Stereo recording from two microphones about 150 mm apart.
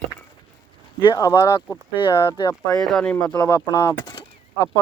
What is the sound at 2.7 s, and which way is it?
Speech, 5° left (ahead or behind).